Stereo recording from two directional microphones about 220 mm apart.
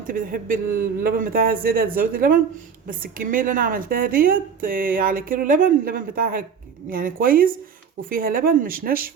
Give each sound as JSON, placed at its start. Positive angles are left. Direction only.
{"t": 0.1, "sound": "a woman's voice", "side_deg": -40}